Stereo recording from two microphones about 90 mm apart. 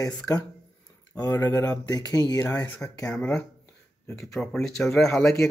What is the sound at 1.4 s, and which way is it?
Speech, 35° left (ahead or behind).